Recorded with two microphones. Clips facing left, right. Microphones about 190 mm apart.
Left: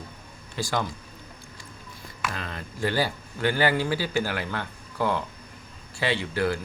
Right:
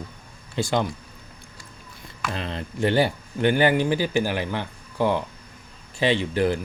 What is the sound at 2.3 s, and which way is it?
Speech, 25° right (ahead or behind).